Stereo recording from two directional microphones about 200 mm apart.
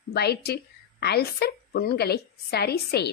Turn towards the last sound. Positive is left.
turn(degrees=55)  # may be behind; listen again after turning